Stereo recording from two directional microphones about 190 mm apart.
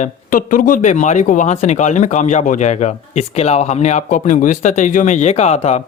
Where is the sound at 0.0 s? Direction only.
45° left (ahead or behind).